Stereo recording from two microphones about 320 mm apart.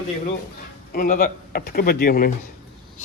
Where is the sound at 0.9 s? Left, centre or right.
Left.